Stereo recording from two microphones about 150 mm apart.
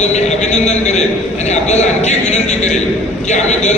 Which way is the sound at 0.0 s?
50° left (ahead or behind).